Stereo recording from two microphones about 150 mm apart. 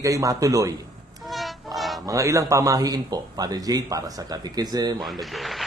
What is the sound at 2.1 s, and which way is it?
Speech, 20° right (ahead or behind).